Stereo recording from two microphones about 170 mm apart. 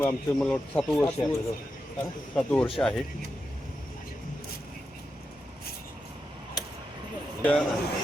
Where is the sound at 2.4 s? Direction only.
5° left (ahead or behind).